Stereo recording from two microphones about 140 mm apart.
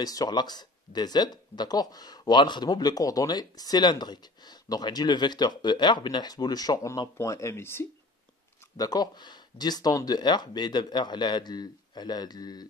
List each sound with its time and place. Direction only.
0.0 s speech: 25° left (ahead or behind)
8.7 s speech: 30° left (ahead or behind)